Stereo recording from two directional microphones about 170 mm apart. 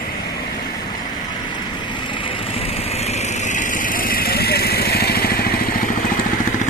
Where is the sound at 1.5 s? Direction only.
30° left (ahead or behind); by 6.1 s 55° left (ahead or behind).